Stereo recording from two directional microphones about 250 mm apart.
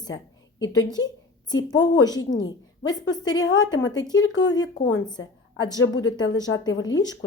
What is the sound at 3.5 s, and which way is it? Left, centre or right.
Speech, left.